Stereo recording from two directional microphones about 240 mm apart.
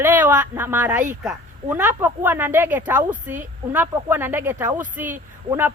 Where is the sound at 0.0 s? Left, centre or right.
Centre.